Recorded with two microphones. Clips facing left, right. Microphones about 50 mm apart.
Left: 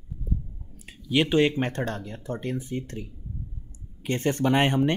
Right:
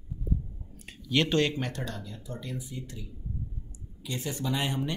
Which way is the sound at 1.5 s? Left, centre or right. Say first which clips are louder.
Left 7 dB; left.